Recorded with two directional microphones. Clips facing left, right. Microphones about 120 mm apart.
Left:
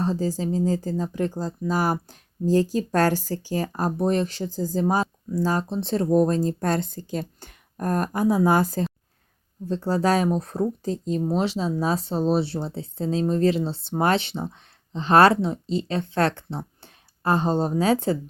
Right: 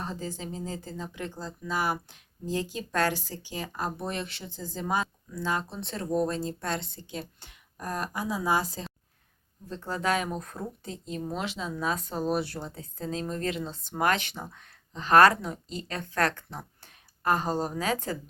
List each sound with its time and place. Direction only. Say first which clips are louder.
0.0 s speech: left 11 dB; 35° left (ahead or behind); by 8.9 s 50° left (ahead or behind)
9.6 s speech: left 8 dB; 35° left (ahead or behind)